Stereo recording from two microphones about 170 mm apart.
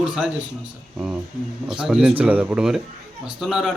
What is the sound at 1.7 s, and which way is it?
A man's voice, 5° right (ahead or behind).